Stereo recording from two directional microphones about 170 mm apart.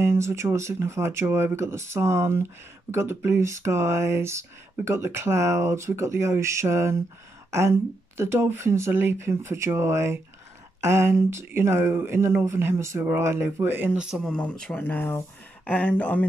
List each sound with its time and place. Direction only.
0.0 s speech: 15° right (ahead or behind)
8.2 s speech: 15° right (ahead or behind); by 16.3 s 10° left (ahead or behind)